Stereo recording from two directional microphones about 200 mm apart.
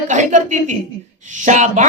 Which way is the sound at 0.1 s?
40° right (ahead or behind).